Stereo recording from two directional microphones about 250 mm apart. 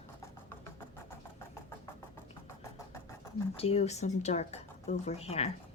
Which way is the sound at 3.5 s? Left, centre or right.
Left.